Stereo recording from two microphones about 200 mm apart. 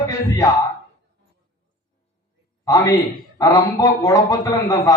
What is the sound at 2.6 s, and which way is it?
A man's voice, 15° left (ahead or behind).